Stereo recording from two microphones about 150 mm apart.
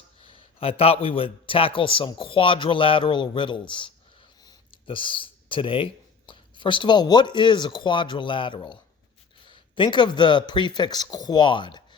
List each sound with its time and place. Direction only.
0.3 s a man's voice: 35° left (ahead or behind)